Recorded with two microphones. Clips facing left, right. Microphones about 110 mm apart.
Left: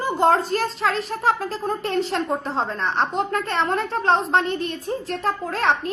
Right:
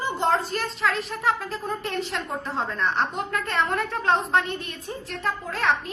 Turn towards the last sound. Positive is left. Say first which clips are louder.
# left 3 dB
turn(degrees=40)  # may be behind; listen again after turning